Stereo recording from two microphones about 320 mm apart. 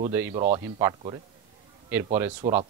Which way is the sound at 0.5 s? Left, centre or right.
Centre.